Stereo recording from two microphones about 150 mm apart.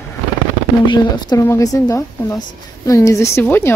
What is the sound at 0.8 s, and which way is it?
A woman's voice, 30° left (ahead or behind).